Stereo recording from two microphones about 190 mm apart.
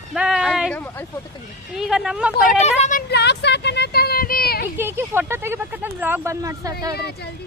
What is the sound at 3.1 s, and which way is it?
Speech, 60° left (ahead or behind).